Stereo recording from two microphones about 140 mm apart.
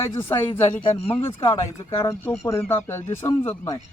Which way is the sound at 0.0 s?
20° left (ahead or behind).